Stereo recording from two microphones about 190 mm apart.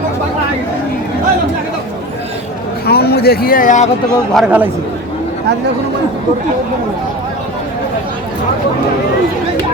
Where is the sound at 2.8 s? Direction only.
55° left (ahead or behind).